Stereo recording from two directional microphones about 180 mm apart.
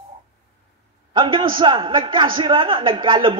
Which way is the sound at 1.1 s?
30° right (ahead or behind).